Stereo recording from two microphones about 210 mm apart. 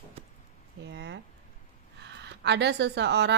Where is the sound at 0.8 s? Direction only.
55° right (ahead or behind).